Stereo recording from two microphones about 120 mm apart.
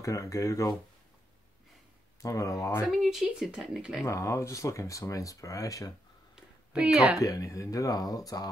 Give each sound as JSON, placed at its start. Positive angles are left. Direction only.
{"t": 0.0, "sound": "speech", "side_deg": 25}
{"t": 2.2, "sound": "speech", "side_deg": 25}
{"t": 2.9, "sound": "speech", "side_deg": 0}
{"t": 4.0, "sound": "speech", "side_deg": 25}
{"t": 6.3, "sound": "a sound", "side_deg": -5}
{"t": 7.2, "sound": "speech", "side_deg": 30}